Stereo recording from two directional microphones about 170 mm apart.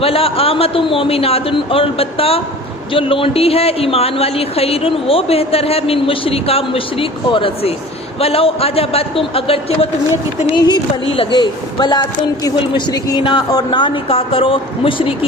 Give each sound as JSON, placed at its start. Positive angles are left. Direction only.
{"t": 0.0, "sound": "a woman's voice", "side_deg": 35}